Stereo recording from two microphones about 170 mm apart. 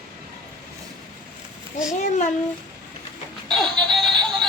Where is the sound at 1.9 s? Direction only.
45° left (ahead or behind).